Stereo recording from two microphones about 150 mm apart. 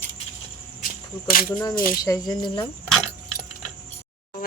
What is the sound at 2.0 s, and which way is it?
Speech, 25° left (ahead or behind).